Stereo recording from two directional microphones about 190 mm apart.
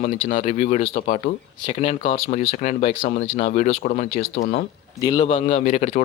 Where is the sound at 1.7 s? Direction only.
35° left (ahead or behind).